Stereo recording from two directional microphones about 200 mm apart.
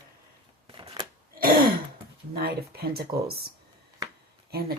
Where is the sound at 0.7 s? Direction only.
20° right (ahead or behind).